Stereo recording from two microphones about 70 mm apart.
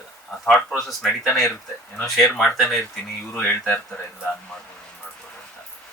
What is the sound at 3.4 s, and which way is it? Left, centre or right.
Speech, left.